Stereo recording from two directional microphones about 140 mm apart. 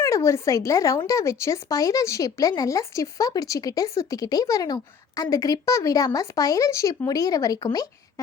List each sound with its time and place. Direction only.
0.0 s speech: 20° left (ahead or behind)